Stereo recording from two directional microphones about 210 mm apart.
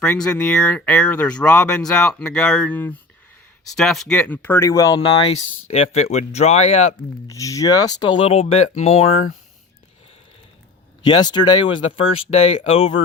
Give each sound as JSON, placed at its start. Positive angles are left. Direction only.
{"t": 0.0, "sound": "speech", "side_deg": 5}
{"t": 7.3, "sound": "speech", "side_deg": 15}
{"t": 11.0, "sound": "speech", "side_deg": 20}
{"t": 11.9, "sound": "speech", "side_deg": 30}